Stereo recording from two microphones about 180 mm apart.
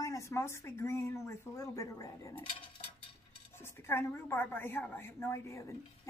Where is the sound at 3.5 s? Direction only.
15° left (ahead or behind).